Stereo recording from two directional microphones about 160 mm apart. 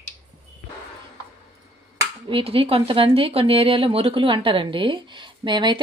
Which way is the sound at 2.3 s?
35° right (ahead or behind).